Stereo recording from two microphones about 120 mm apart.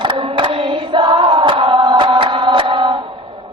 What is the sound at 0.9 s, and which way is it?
Chant, 40° right (ahead or behind).